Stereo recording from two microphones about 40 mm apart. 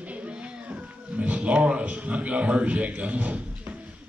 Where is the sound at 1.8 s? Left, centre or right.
Right.